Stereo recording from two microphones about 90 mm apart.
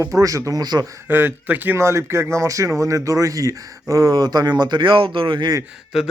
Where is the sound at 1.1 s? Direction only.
25° right (ahead or behind); by 5.5 s 60° right (ahead or behind).